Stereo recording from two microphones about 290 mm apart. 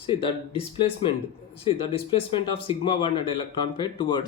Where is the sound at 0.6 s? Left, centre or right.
Centre.